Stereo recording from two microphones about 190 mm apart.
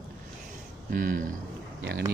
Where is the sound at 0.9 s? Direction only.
45° right (ahead or behind).